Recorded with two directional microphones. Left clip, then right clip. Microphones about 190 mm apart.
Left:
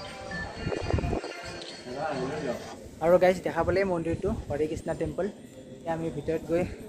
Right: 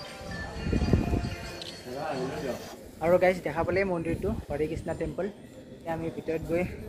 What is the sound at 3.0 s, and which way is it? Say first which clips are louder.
A man's voice: left 2 dB; 10° left (ahead or behind).